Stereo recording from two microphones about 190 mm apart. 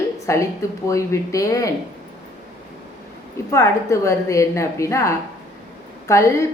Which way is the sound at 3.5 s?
15° left (ahead or behind).